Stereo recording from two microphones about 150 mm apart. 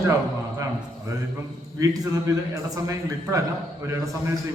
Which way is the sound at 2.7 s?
20° right (ahead or behind).